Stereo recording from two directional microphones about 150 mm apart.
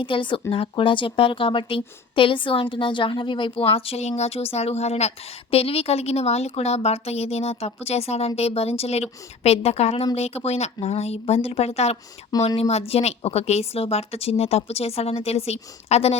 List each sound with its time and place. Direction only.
0.0 s a woman's voice: 35° left (ahead or behind)